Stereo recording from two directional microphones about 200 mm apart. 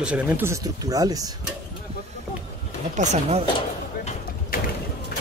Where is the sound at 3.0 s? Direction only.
35° right (ahead or behind).